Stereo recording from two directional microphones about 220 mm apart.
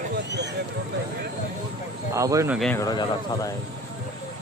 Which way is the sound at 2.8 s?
15° left (ahead or behind).